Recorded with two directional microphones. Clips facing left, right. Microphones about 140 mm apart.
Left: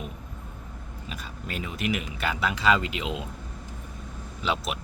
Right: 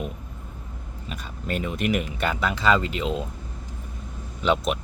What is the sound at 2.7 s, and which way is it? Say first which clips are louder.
Speech: right 3 dB; 40° right (ahead or behind).